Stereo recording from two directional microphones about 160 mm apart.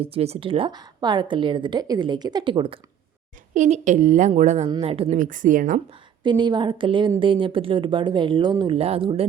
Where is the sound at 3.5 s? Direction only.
50° right (ahead or behind).